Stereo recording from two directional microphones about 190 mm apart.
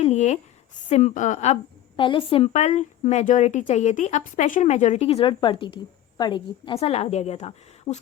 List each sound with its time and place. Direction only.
0.0 s a sound: 35° left (ahead or behind)
0.9 s a woman's voice: 40° left (ahead or behind)
2.0 s a woman's voice: 25° left (ahead or behind)